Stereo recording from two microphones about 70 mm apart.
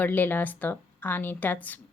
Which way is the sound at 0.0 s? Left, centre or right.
Left.